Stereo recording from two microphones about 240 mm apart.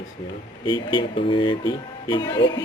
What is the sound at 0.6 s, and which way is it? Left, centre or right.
Speech, centre.